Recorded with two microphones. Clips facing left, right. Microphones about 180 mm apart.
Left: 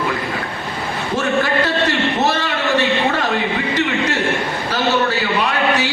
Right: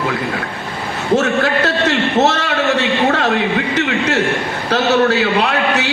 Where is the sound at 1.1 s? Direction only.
75° right (ahead or behind).